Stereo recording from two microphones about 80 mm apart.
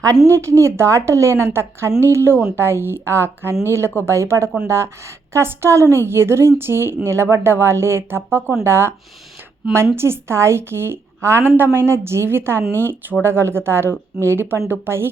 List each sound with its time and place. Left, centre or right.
0.3 s a woman's voice: right